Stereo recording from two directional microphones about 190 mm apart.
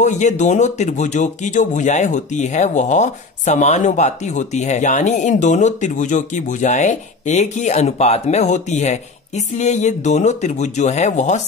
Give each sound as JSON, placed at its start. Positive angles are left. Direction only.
{"t": 0.0, "sound": "speech", "side_deg": 40}